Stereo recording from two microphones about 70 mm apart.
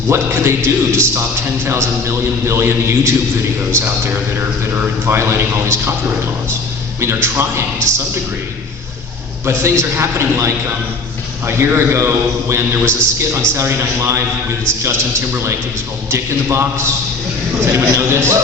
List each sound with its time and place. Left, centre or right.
0.1 s a man's voice: right
5.0 s a man's voice: right
7.0 s a man's voice: right
9.5 s a man's voice: right